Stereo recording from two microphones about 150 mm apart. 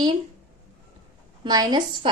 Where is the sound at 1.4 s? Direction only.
30° right (ahead or behind).